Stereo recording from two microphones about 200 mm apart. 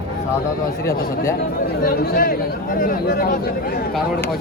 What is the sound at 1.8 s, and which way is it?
Speech, 45° left (ahead or behind).